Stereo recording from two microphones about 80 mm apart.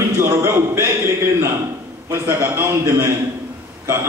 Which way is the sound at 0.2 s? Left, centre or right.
Right.